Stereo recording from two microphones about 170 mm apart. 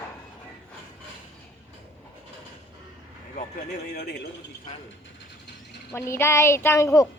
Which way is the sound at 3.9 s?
65° left (ahead or behind).